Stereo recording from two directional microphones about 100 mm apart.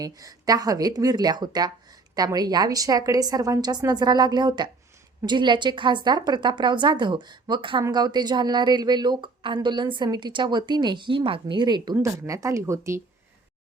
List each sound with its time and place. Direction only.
0.0 s a woman's voice: 35° right (ahead or behind)
11.9 s a woman's voice: 30° right (ahead or behind)